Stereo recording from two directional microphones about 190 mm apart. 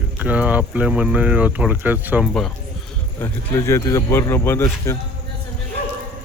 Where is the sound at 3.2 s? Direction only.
10° left (ahead or behind).